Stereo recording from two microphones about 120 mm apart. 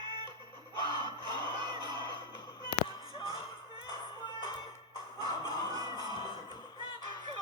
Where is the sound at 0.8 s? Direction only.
40° right (ahead or behind).